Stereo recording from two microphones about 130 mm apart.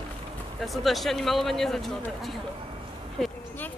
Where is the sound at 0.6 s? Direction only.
Centre (ahead or behind).